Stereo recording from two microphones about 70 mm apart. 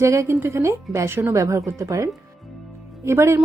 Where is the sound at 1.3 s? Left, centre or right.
Right.